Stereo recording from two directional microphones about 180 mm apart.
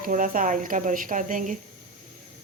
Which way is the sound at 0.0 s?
50° right (ahead or behind).